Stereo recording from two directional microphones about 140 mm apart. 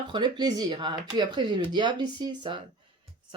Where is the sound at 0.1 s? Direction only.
30° right (ahead or behind).